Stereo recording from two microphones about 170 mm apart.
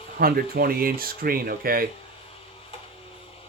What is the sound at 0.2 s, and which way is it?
Speech, 60° right (ahead or behind).